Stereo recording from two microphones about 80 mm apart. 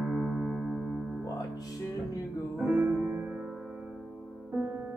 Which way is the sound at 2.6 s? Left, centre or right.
Centre.